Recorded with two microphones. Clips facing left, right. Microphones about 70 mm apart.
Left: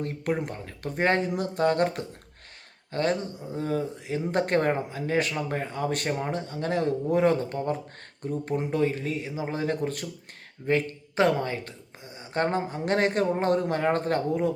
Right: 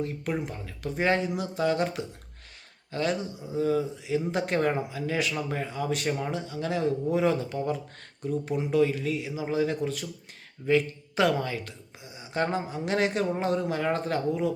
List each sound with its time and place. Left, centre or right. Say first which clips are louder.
0.0 s speech: left 2 dB; left